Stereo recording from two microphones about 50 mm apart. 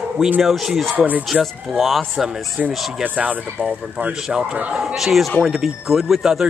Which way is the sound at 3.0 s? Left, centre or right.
Right.